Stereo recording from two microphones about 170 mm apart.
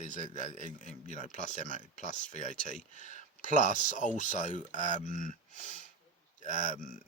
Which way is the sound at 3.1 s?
50° right (ahead or behind).